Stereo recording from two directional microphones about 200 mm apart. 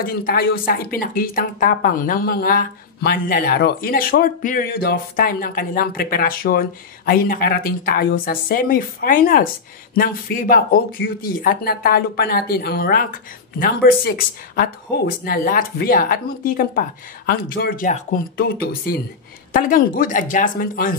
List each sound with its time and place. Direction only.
0.0 s speech: 45° left (ahead or behind)